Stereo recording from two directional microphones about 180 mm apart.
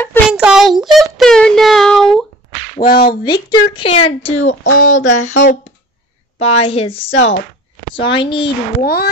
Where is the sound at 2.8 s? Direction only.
55° left (ahead or behind).